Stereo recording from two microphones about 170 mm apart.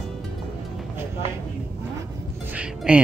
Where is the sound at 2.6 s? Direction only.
5° right (ahead or behind).